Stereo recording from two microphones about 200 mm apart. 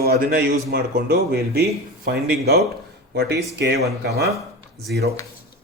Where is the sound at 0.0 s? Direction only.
50° right (ahead or behind).